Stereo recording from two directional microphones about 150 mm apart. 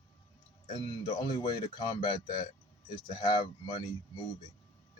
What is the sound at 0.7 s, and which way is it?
Speech, 30° left (ahead or behind).